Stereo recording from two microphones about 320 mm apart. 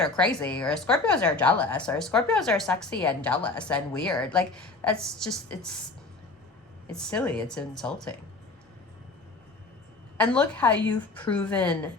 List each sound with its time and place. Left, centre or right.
0.0 s a woman's voice: centre
6.9 s a woman's voice: centre
10.2 s a woman's voice: centre